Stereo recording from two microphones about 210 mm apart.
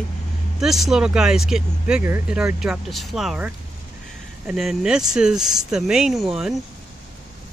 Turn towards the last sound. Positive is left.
turn(degrees=0)  # may be behind; listen again after turning